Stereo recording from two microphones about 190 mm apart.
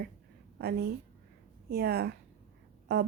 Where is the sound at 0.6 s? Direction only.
55° right (ahead or behind).